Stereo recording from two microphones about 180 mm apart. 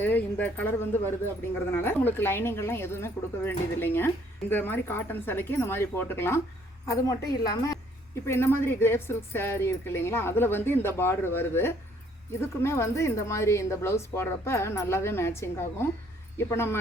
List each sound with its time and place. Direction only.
0.0 s a woman's voice: 10° left (ahead or behind)